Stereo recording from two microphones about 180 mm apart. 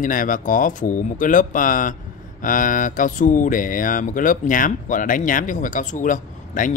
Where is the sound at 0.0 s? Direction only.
50° left (ahead or behind).